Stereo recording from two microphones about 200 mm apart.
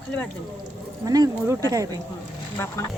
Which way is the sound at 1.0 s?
20° right (ahead or behind).